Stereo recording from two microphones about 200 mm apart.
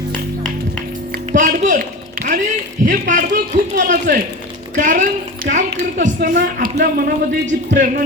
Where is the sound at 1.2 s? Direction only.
40° right (ahead or behind).